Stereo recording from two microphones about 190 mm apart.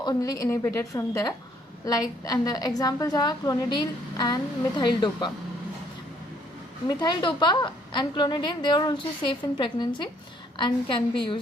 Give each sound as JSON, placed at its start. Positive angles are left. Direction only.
{"t": 0.0, "sound": "a woman's voice", "side_deg": 20}
{"t": 6.8, "sound": "a woman's voice", "side_deg": 20}